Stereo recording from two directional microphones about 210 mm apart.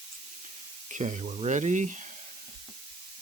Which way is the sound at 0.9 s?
35° right (ahead or behind).